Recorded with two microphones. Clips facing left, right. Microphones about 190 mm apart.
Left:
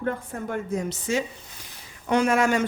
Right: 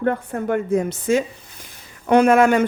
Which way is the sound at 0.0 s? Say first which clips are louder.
Right 7 dB; 65° right (ahead or behind).